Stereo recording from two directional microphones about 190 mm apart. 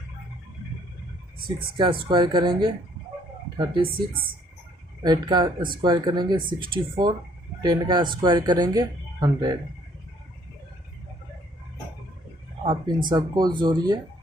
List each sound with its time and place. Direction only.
1.5 s speech: 25° right (ahead or behind)
5.0 s speech: 25° right (ahead or behind)
12.6 s speech: 25° right (ahead or behind)